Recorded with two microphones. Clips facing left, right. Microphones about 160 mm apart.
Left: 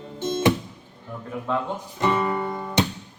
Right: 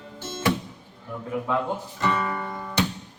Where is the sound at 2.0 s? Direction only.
20° left (ahead or behind).